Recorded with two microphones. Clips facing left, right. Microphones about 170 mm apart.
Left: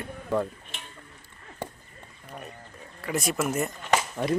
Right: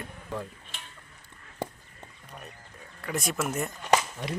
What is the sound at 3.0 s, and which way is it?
Speech, centre (ahead or behind).